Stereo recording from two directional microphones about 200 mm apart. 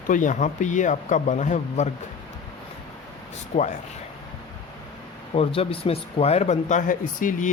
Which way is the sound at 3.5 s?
30° left (ahead or behind).